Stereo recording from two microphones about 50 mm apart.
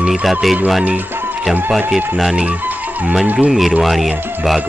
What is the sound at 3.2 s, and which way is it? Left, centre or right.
Speech, right.